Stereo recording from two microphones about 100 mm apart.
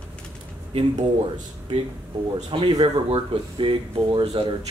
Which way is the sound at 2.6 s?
55° right (ahead or behind).